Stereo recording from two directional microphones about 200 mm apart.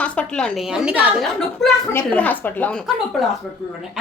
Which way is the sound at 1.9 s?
10° left (ahead or behind).